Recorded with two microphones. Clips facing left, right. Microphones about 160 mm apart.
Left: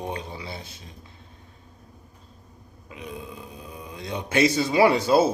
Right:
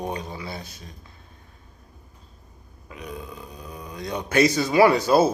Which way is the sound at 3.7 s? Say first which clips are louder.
Right 3 dB; 40° right (ahead or behind).